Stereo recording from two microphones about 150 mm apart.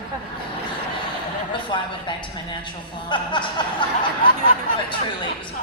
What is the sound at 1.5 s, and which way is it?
A woman's voice, 30° left (ahead or behind).